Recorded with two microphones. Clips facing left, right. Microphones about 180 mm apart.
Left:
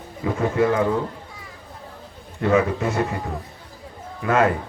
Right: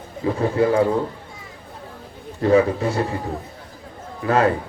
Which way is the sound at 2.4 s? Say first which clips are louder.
Right 3 dB; 35° right (ahead or behind).